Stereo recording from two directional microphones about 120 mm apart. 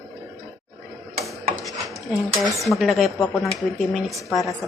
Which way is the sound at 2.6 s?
Centre (ahead or behind).